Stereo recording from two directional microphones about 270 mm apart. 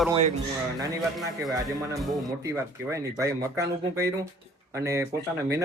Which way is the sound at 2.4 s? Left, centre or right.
Centre.